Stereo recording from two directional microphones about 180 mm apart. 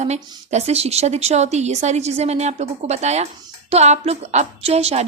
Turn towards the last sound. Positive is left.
turn(degrees=-35)  # may be behind; listen again after turning